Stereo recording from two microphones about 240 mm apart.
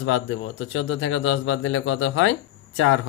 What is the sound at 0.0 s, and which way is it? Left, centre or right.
Speech, left.